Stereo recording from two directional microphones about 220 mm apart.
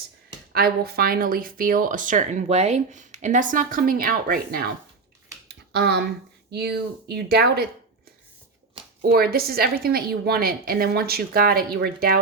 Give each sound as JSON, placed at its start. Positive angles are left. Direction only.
{"t": 0.5, "sound": "speech", "side_deg": -45}
{"t": 5.7, "sound": "a woman's voice", "side_deg": -45}
{"t": 9.0, "sound": "a woman's voice", "side_deg": -40}